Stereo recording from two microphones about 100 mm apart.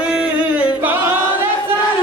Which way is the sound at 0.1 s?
15° right (ahead or behind).